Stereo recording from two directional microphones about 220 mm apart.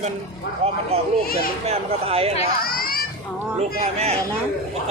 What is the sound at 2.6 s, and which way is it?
Children playing, 40° left (ahead or behind).